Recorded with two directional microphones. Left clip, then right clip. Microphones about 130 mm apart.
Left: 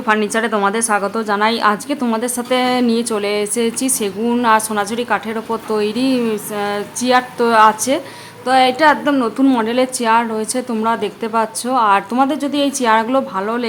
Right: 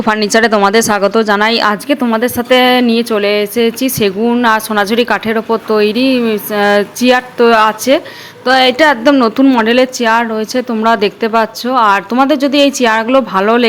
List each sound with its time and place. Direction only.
0.0 s a woman's voice: 45° right (ahead or behind); by 4.4 s 15° right (ahead or behind)
4.4 s a woman's voice: 35° right (ahead or behind)
6.6 s a sound: 45° right (ahead or behind)
7.0 s a woman's voice: 30° right (ahead or behind)
10.8 s a woman's voice: 35° right (ahead or behind)
13.3 s a woman's voice: 35° right (ahead or behind)